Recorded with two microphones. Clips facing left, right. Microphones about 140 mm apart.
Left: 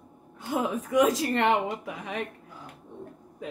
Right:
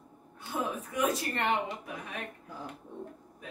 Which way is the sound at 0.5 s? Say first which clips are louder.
Left 9 dB; 90° left.